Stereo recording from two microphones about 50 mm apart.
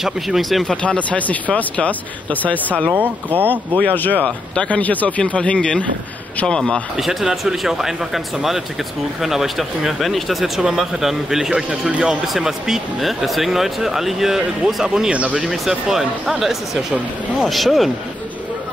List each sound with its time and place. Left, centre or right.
0.0 s speech: centre
0.8 s speech: left
3.0 s speech: right
3.4 s speech: left; by 6.8 s centre
7.0 s speech: centre
15.0 s speech: right
15.9 s speech: centre